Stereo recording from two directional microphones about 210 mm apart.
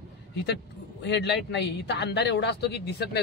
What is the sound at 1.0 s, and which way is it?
Speech, 55° left (ahead or behind).